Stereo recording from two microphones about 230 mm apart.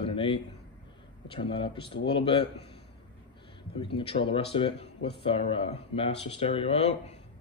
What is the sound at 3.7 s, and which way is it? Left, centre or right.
Speech, left.